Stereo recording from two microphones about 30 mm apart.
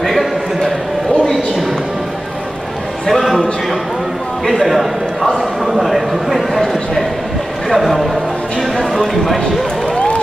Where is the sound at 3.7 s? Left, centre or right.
Centre.